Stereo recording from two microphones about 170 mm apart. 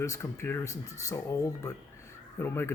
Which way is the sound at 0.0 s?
20° left (ahead or behind).